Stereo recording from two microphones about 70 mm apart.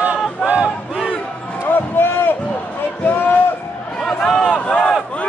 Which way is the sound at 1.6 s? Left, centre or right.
Left.